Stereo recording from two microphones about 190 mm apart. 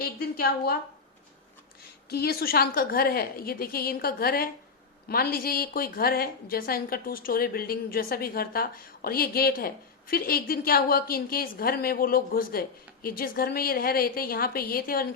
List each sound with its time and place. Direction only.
0.0 s a woman's voice: 50° left (ahead or behind)
2.0 s a woman's voice: 55° left (ahead or behind)